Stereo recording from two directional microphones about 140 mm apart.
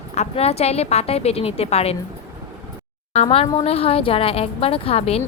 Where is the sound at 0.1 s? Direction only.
50° left (ahead or behind).